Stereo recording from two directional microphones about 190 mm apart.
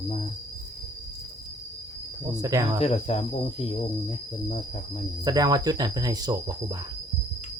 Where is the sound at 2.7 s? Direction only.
35° left (ahead or behind).